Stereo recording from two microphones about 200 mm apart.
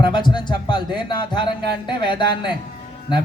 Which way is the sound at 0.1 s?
25° left (ahead or behind).